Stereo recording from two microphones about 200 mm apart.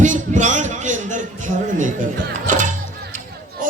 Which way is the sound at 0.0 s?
40° right (ahead or behind).